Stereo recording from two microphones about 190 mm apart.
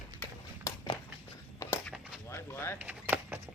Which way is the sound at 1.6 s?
15° left (ahead or behind).